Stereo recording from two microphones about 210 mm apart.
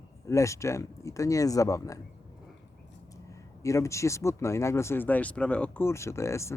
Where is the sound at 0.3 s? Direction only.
15° left (ahead or behind).